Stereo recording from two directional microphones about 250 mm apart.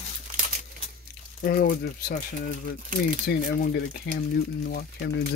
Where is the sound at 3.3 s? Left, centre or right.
Left.